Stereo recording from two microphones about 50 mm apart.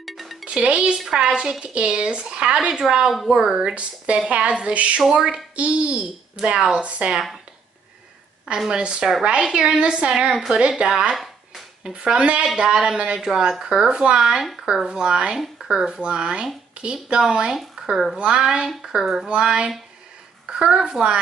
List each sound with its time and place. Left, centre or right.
0.0 s music: centre
0.5 s a woman's voice: centre
3.5 s speech: right
5.1 s a woman's voice: centre
8.6 s a woman's voice: centre
10.3 s a woman's voice: centre
10.8 s a woman's voice: centre
17.8 s a sound: centre
18.1 s a woman's voice: centre